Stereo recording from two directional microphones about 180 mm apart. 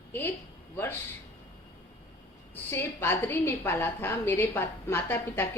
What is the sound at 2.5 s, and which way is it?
A woman's voice, 10° left (ahead or behind).